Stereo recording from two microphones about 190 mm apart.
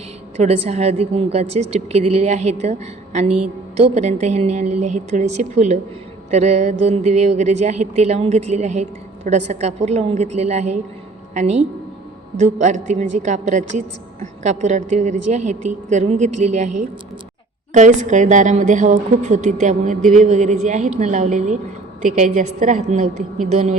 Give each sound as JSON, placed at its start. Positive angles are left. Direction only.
{"t": 0.4, "sound": "a woman's voice", "side_deg": -35}
{"t": 17.7, "sound": "a woman's voice", "side_deg": -40}